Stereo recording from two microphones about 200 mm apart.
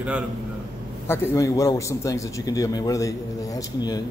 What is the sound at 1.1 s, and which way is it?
A man's voice, 15° left (ahead or behind).